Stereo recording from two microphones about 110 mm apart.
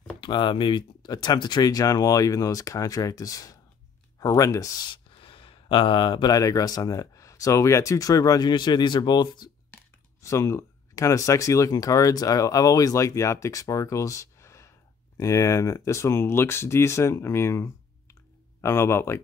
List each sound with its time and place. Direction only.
0.2 s speech: 45° left (ahead or behind); by 4.8 s 30° left (ahead or behind)
4.9 s speech: 50° left (ahead or behind)
10.2 s speech: 30° left (ahead or behind)